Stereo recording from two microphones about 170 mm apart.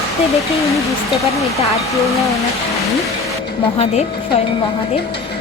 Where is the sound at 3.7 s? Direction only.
40° left (ahead or behind).